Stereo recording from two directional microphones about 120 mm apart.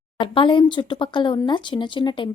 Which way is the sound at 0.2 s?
45° left (ahead or behind).